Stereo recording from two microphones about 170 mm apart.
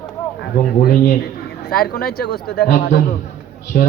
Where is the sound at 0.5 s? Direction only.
60° left (ahead or behind).